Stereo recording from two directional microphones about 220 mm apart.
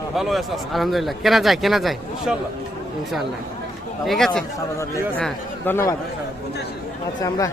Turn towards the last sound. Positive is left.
turn(degrees=15)  # may be behind; listen again after turning